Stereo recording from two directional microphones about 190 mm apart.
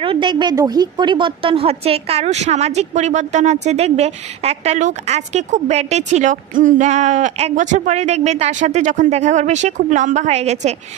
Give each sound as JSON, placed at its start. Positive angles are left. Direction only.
{"t": 0.0, "sound": "a woman's voice", "side_deg": -25}